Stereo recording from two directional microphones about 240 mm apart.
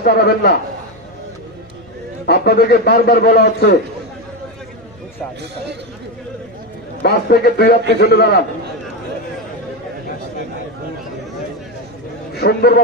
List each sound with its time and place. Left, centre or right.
0.0 s a man's voice: left
2.2 s a man's voice: left
7.0 s a man's voice: left
12.4 s a man's voice: left